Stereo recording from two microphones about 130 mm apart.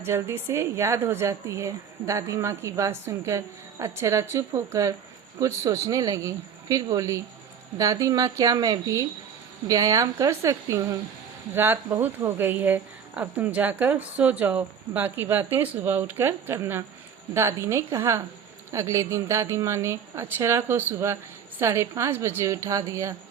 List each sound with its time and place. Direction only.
0.0 s a woman's voice: 20° right (ahead or behind)